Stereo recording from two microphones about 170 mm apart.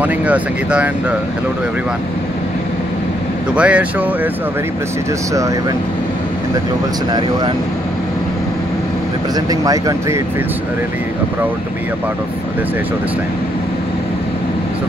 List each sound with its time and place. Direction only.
0.0 s speech: 10° right (ahead or behind)
3.5 s speech: 5° right (ahead or behind)
7.1 s speech: 25° right (ahead or behind)
9.5 s speech: 20° right (ahead or behind)